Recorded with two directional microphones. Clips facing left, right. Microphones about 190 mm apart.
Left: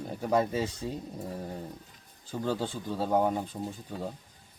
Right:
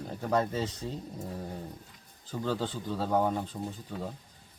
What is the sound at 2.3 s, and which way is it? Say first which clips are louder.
Speech: left 1 dB; 15° left (ahead or behind).